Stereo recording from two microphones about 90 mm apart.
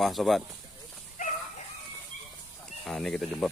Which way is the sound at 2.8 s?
5° left (ahead or behind).